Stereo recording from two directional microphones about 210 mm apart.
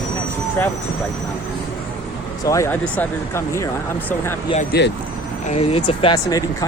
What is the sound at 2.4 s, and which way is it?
Speech, 15° left (ahead or behind).